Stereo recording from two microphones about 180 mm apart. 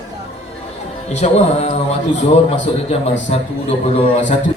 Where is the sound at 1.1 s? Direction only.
35° left (ahead or behind).